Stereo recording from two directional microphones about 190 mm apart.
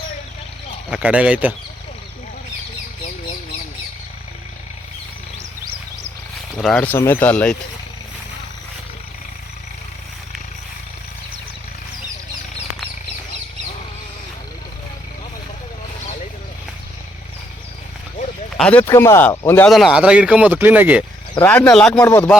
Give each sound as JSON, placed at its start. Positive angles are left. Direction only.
{"t": 0.9, "sound": "speech", "side_deg": -5}
{"t": 6.6, "sound": "speech", "side_deg": 5}
{"t": 18.5, "sound": "speech", "side_deg": 5}
{"t": 19.7, "sound": "speech", "side_deg": 0}
{"t": 21.4, "sound": "speech", "side_deg": 10}
{"t": 21.9, "sound": "speech", "side_deg": 15}